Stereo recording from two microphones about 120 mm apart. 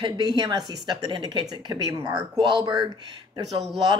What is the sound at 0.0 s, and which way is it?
A woman's voice, 40° right (ahead or behind).